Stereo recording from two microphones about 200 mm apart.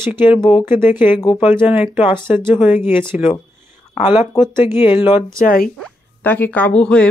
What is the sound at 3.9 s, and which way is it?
Speech, 25° left (ahead or behind).